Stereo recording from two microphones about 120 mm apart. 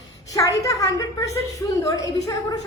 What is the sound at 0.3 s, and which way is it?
A woman's voice, 30° left (ahead or behind).